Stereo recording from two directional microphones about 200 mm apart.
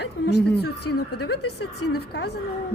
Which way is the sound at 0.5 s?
55° left (ahead or behind).